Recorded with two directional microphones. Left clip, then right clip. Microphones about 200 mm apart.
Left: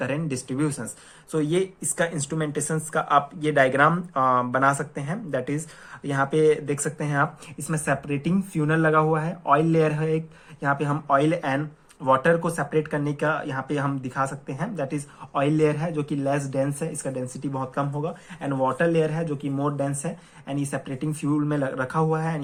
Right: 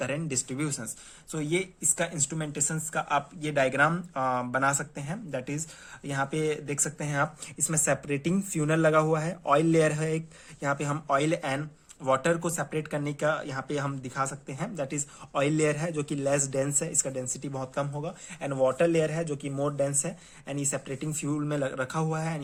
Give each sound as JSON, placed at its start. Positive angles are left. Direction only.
{"t": 0.0, "sound": "speech", "side_deg": -30}
{"t": 7.7, "sound": "speech", "side_deg": -40}